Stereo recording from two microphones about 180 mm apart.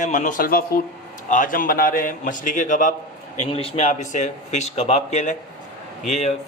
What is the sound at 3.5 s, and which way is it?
Speech, 30° left (ahead or behind).